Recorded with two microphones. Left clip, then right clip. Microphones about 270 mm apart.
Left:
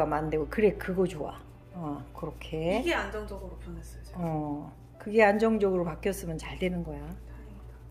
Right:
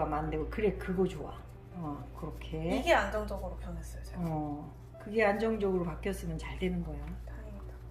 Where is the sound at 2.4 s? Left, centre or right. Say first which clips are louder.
Left 5 dB; centre.